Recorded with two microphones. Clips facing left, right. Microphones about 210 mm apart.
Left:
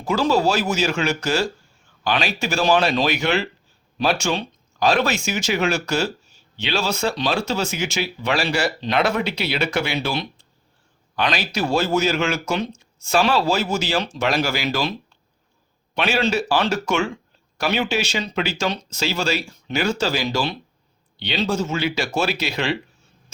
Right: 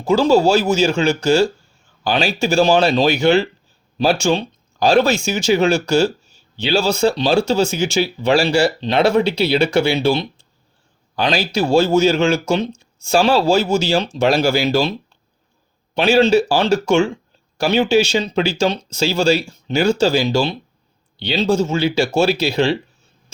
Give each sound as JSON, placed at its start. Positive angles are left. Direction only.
{"t": 0.0, "sound": "speech", "side_deg": -30}
{"t": 16.0, "sound": "speech", "side_deg": -30}